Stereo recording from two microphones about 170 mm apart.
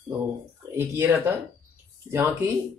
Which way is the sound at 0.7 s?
15° right (ahead or behind).